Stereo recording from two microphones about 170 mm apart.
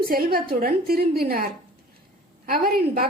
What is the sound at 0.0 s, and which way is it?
A woman's voice, 60° right (ahead or behind).